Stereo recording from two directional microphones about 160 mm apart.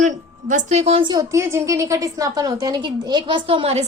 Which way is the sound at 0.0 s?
50° right (ahead or behind).